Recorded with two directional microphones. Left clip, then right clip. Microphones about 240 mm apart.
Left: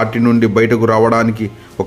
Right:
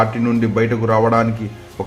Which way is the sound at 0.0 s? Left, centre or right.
Left.